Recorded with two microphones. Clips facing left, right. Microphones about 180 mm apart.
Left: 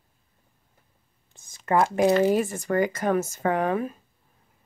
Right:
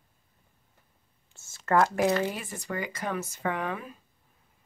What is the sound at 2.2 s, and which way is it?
Speech, 45° left (ahead or behind).